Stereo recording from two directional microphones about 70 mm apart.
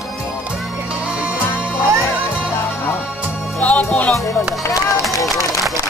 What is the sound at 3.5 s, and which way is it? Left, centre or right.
Music, left.